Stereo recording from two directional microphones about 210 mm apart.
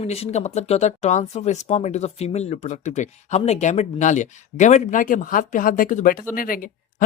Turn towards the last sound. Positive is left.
turn(degrees=40)  # may be behind; listen again after turning